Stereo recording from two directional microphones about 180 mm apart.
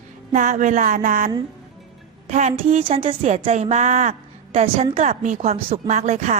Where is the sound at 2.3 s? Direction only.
40° right (ahead or behind).